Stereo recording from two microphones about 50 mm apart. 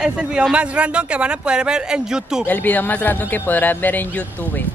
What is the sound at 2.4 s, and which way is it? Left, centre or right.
Speech, left.